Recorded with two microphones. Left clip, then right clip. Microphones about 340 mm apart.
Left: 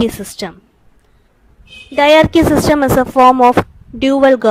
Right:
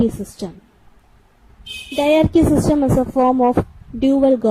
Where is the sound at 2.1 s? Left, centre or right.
Left.